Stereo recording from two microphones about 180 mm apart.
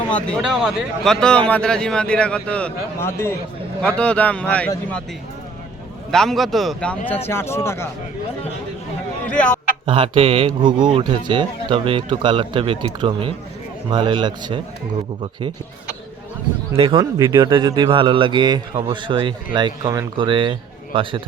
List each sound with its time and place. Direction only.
0.1 s a man's voice: 5° left (ahead or behind)
6.1 s a man's voice: centre (ahead or behind)
9.2 s speech: 5° left (ahead or behind)
9.8 s speech: 30° right (ahead or behind)
16.7 s speech: 30° right (ahead or behind)
17.0 s speech: 20° right (ahead or behind)